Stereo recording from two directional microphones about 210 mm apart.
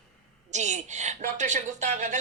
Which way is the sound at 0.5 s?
35° right (ahead or behind).